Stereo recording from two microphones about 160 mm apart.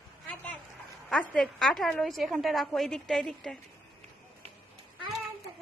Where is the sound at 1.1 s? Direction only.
5° left (ahead or behind).